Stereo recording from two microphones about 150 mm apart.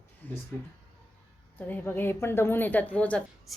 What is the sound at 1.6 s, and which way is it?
A woman's voice, 10° left (ahead or behind).